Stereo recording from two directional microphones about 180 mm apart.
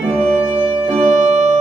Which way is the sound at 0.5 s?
30° right (ahead or behind).